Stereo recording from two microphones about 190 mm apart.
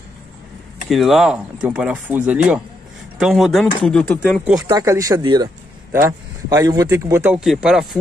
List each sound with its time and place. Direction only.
0.8 s speech: centre (ahead or behind)
4.6 s a man's voice: 20° right (ahead or behind); by 8.0 s centre (ahead or behind)